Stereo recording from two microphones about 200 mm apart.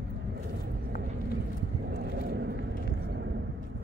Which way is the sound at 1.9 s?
60° right (ahead or behind).